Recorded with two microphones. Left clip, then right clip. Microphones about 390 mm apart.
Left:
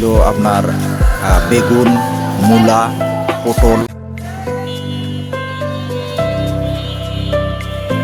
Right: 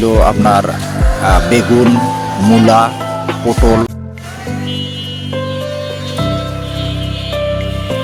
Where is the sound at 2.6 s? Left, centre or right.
Left.